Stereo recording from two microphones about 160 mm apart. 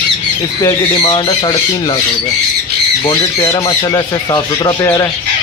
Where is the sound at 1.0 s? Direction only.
30° left (ahead or behind).